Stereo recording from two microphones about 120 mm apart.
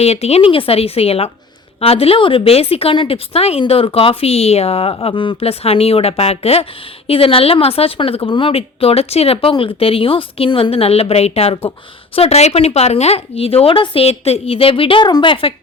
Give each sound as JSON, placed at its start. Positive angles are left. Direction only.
{"t": 0.0, "sound": "a woman's voice", "side_deg": 60}